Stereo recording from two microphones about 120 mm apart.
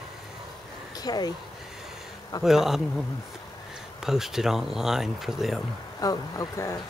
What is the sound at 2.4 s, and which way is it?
Speech, 5° right (ahead or behind).